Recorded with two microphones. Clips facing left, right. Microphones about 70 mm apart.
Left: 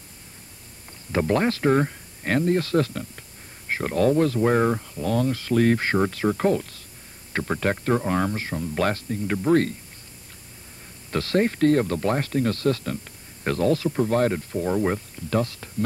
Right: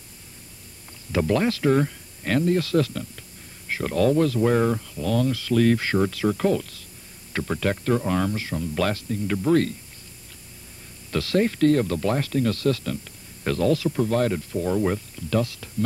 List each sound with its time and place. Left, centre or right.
1.1 s speech: left
11.1 s speech: left